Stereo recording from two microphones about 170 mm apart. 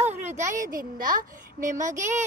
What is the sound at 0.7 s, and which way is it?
Speech, 55° right (ahead or behind).